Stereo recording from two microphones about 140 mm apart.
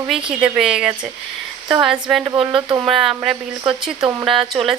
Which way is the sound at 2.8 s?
Centre (ahead or behind).